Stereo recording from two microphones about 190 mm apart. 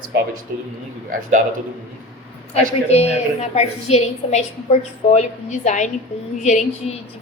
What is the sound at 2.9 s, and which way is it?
A woman's voice, 35° left (ahead or behind).